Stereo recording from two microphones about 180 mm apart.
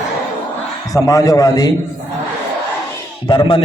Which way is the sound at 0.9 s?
20° left (ahead or behind).